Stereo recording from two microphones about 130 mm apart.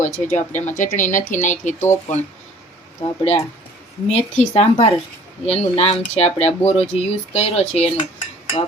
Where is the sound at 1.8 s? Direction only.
20° left (ahead or behind).